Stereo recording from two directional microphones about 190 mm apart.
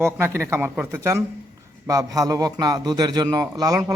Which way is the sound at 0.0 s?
15° right (ahead or behind).